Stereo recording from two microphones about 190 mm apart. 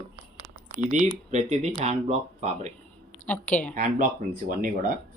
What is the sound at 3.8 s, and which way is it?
Speech, 45° right (ahead or behind).